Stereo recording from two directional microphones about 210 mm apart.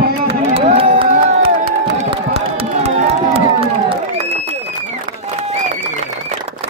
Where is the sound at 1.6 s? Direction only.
45° right (ahead or behind).